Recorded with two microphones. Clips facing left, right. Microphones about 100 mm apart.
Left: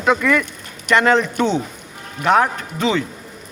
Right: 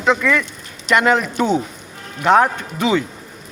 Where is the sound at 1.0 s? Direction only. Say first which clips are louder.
Left 2 dB; 10° right (ahead or behind).